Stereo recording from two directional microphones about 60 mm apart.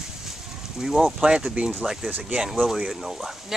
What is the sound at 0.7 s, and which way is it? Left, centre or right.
Speech, centre.